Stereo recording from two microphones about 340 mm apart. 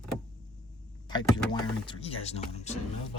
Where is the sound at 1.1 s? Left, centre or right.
Centre.